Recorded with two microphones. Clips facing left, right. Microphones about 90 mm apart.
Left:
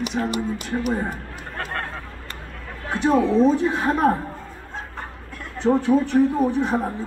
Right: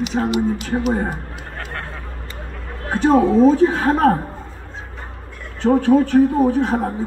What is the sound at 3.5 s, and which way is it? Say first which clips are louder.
Speech: right 5 dB; 70° right (ahead or behind).